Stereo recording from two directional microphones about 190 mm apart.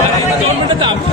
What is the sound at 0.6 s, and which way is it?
Chatter, 25° right (ahead or behind).